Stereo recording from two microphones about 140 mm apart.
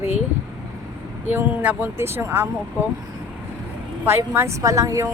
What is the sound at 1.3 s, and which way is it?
Speech, 15° right (ahead or behind).